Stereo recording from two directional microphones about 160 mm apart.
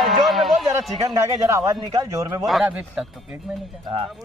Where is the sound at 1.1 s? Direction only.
20° right (ahead or behind).